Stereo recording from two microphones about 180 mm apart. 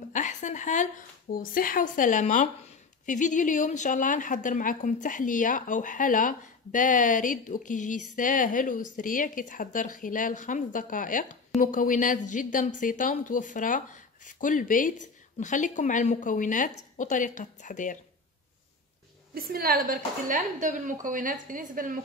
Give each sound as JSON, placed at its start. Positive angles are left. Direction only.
{"t": 0.1, "sound": "a sound", "side_deg": 45}
{"t": 1.3, "sound": "a woman's voice", "side_deg": 50}
{"t": 19.3, "sound": "a woman's voice", "side_deg": -55}